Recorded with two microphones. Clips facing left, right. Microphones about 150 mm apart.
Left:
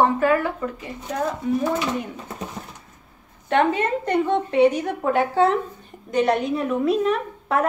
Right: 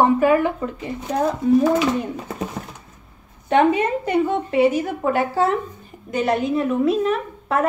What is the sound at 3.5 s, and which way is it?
A woman's voice, 15° right (ahead or behind).